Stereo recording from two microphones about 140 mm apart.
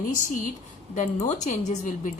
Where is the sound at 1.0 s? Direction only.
60° left (ahead or behind).